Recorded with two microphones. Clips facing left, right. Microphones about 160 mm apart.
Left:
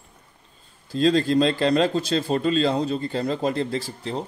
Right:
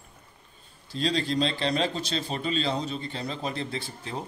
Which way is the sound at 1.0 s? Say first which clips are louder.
Left 8 dB; 45° left (ahead or behind).